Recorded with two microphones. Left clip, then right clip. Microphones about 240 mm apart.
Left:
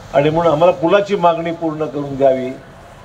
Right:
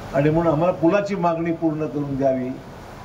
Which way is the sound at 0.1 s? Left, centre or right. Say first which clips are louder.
Left 6 dB; centre.